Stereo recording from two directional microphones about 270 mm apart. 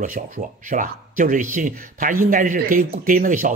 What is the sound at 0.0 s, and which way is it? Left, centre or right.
Speech, right.